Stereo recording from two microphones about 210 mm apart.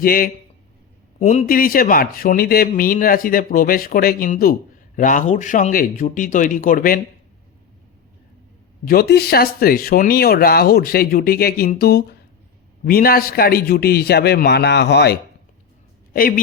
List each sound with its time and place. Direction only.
0.0 s speech: 45° left (ahead or behind)
1.2 s a man's voice: 35° left (ahead or behind)
8.8 s speech: 45° left (ahead or behind)
16.1 s speech: 45° left (ahead or behind)